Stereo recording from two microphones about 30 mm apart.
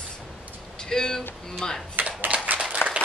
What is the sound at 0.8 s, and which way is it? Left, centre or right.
Speech, left.